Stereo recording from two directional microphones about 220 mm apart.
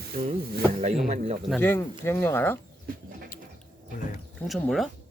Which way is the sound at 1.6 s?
10° left (ahead or behind).